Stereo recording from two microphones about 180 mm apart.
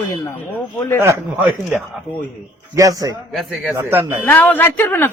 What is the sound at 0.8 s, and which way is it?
Speech, 15° left (ahead or behind).